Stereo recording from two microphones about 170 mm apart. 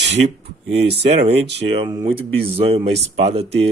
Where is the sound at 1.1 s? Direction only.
40° right (ahead or behind).